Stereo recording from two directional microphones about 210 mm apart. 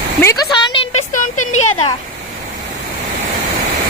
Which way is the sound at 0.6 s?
25° left (ahead or behind).